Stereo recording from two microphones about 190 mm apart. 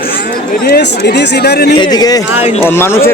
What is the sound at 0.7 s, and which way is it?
Speech, 60° left (ahead or behind).